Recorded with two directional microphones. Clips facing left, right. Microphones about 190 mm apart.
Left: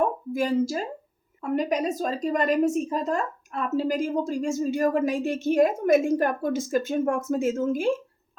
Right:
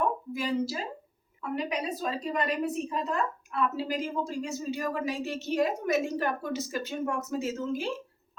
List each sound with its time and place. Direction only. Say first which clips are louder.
0.3 s a woman's voice: left 10 dB; 45° left (ahead or behind)